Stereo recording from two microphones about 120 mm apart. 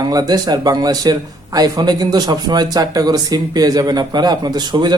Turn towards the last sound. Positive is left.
turn(degrees=-35)  # may be behind; listen again after turning